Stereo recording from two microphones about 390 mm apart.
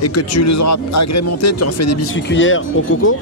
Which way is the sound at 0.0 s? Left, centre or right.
Left.